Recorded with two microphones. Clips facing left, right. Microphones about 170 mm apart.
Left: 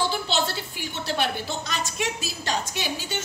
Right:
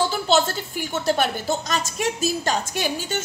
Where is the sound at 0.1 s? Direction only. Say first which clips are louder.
Right 6 dB; 45° right (ahead or behind).